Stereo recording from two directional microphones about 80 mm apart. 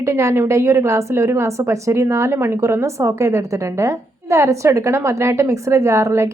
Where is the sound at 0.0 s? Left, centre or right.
Right.